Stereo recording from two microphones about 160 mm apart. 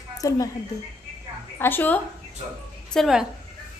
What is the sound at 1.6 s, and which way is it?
Speech, 10° left (ahead or behind).